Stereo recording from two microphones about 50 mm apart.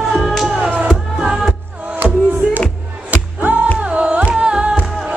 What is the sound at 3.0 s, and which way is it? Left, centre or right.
Music, right.